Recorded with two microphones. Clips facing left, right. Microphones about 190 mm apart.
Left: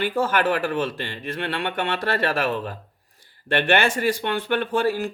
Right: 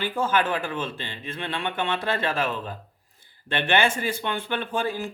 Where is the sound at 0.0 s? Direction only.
65° left (ahead or behind).